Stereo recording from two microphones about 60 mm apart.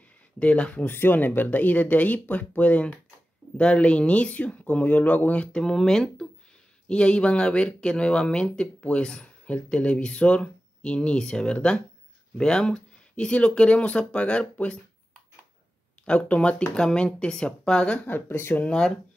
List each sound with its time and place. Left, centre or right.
0.4 s speech: left
0.8 s speech: left; by 14.8 s centre
16.1 s speech: centre
17.9 s speech: left
18.7 s speech: centre